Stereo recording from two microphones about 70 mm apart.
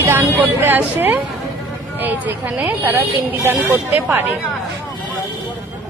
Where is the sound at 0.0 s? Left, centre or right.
Right.